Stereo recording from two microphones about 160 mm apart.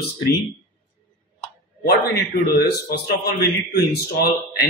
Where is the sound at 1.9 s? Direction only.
75° left (ahead or behind).